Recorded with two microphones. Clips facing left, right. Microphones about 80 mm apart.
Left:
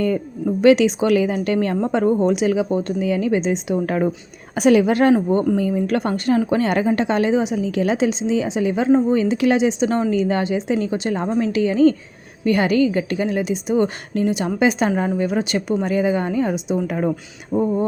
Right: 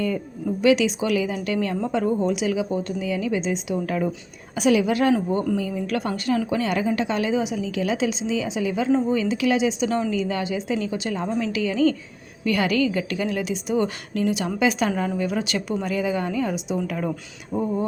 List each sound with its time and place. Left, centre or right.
0.6 s a woman's voice: left
17.1 s speech: centre